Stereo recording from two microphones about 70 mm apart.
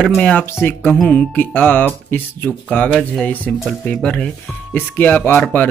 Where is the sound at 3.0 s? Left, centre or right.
Centre.